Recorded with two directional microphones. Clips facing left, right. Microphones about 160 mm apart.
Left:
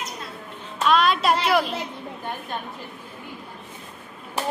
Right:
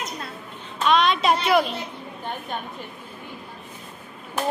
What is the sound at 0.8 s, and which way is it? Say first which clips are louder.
Music: even; 5° left (ahead or behind).